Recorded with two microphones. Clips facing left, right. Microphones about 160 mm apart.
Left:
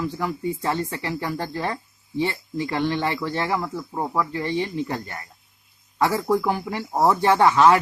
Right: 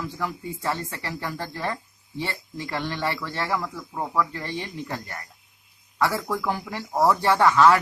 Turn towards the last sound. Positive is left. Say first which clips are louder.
# left 2 dB
turn(degrees=20)  # may be behind; listen again after turning